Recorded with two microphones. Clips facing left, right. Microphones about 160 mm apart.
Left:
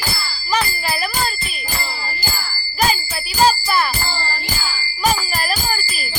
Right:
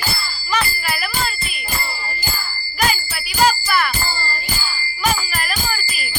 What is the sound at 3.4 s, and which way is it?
Music, 30° left (ahead or behind).